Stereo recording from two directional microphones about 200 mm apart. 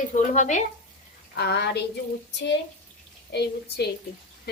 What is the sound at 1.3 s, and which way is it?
A woman's voice, 55° left (ahead or behind).